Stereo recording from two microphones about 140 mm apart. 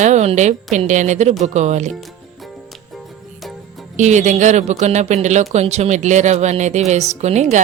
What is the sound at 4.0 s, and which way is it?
Speech, 55° right (ahead or behind).